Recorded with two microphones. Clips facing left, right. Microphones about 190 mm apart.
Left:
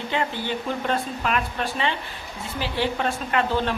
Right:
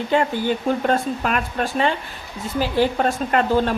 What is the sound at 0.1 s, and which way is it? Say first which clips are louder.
A woman's voice: right 7 dB; 45° right (ahead or behind).